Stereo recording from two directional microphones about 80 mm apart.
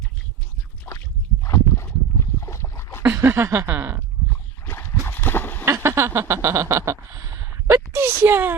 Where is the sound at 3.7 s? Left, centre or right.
Right.